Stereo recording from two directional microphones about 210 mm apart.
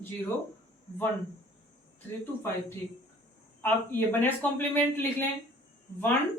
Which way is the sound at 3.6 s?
10° left (ahead or behind).